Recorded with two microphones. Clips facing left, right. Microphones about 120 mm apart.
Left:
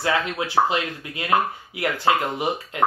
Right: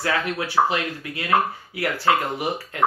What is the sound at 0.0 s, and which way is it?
Speech, 20° left (ahead or behind).